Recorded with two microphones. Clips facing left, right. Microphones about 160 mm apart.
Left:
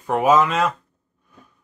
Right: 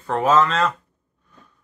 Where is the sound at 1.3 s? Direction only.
10° left (ahead or behind).